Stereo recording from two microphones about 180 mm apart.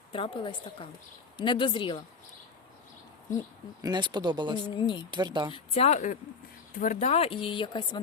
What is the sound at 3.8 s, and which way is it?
Speech, 25° right (ahead or behind).